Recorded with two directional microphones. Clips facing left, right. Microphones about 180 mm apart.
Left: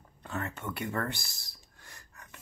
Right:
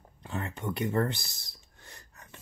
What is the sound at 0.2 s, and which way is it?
Speech, 20° right (ahead or behind).